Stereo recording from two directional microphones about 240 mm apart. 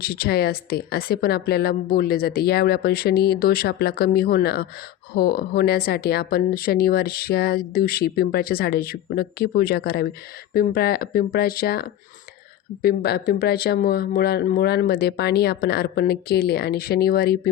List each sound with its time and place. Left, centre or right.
0.0 s speech: left